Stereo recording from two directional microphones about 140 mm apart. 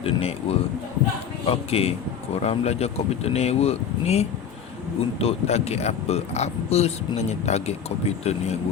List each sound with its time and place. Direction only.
0.0 s speech: 45° left (ahead or behind)